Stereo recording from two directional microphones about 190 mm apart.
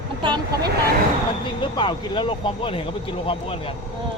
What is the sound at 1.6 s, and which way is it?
Speech, 25° left (ahead or behind).